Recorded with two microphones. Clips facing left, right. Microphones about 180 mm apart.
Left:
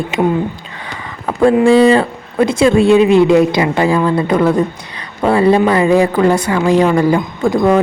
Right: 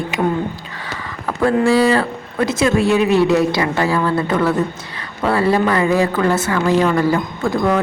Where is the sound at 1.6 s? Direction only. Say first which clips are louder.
Left 5 dB; 20° left (ahead or behind).